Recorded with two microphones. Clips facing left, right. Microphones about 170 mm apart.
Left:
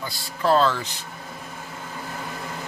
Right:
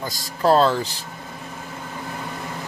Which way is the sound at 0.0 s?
40° right (ahead or behind).